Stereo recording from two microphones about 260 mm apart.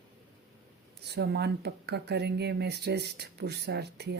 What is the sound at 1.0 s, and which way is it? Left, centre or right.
Speech, right.